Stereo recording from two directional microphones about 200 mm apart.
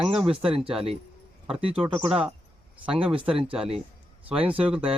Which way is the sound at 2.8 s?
25° right (ahead or behind).